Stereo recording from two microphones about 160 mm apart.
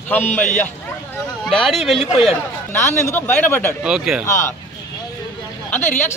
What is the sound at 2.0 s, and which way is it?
Speech, 40° left (ahead or behind).